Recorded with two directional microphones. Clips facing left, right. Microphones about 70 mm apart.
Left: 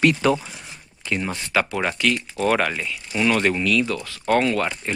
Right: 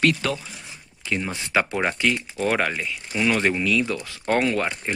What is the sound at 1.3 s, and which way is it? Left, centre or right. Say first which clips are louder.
Speech: even; right.